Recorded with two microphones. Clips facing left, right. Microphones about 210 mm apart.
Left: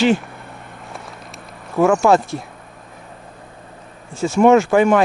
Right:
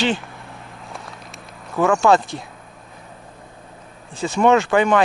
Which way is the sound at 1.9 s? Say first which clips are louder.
Right 1 dB; centre (ahead or behind).